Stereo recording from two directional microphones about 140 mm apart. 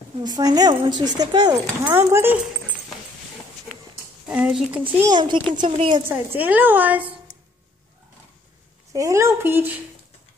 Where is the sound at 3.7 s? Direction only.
5° left (ahead or behind).